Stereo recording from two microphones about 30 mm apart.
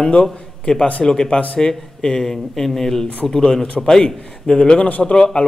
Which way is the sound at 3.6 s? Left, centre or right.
Left.